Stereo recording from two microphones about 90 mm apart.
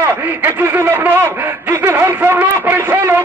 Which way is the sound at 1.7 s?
30° right (ahead or behind).